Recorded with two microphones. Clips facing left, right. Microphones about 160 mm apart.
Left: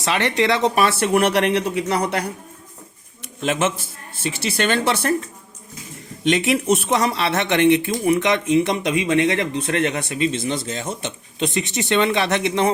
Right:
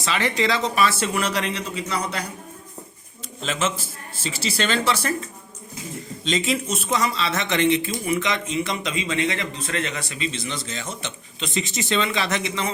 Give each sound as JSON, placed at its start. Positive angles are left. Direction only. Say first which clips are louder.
{"t": 0.0, "sound": "speech", "louder": "left 3 dB", "side_deg": 65}
{"t": 3.4, "sound": "speech", "louder": "left 5 dB", "side_deg": 60}
{"t": 6.2, "sound": "speech", "louder": "left 6 dB", "side_deg": 70}